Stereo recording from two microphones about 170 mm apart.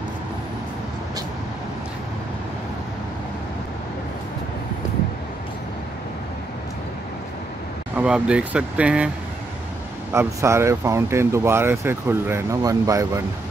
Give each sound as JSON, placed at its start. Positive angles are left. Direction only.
{"t": 7.9, "sound": "speech", "side_deg": -5}
{"t": 10.1, "sound": "speech", "side_deg": -15}